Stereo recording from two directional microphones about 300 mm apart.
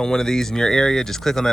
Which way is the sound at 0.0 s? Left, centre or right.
Centre.